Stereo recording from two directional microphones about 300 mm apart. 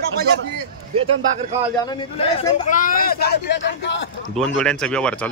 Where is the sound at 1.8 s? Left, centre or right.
Centre; by 4.1 s left.